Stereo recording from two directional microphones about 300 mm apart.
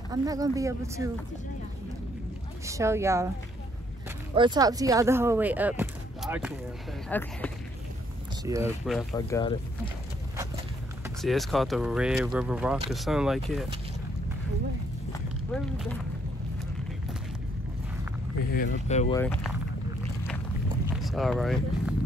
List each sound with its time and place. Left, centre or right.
0.1 s speech: centre
2.6 s speech: centre
4.4 s speech: centre
7.1 s speech: centre
8.5 s speech: centre
9.1 s speech: centre
11.1 s speech: centre
15.1 s a sound: centre
18.5 s speech: left
19.1 s speech: centre
20.9 s speech: centre